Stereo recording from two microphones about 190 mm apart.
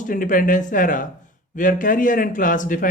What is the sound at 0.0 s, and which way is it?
Speech, 45° left (ahead or behind).